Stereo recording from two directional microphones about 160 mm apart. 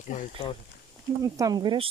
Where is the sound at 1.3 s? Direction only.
25° right (ahead or behind).